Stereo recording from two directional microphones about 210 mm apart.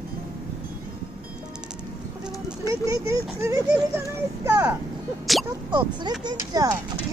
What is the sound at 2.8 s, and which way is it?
Speech, 15° right (ahead or behind).